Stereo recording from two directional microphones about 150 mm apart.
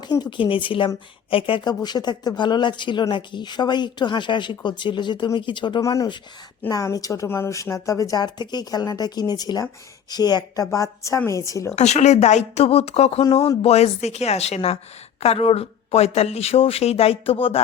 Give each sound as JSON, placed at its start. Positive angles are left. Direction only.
{"t": 0.0, "sound": "speech", "side_deg": 30}
{"t": 11.8, "sound": "speech", "side_deg": 50}